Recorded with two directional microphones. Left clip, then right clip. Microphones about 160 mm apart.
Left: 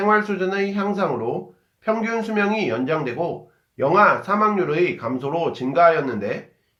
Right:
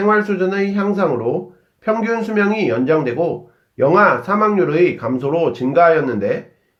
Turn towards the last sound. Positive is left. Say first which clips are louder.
# right 4 dB
turn(degrees=-25)  # may be behind; listen again after turning